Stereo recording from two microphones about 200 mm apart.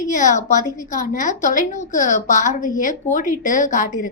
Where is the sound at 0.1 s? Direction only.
40° left (ahead or behind).